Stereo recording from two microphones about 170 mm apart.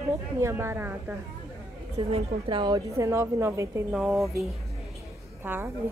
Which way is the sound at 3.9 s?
Centre (ahead or behind).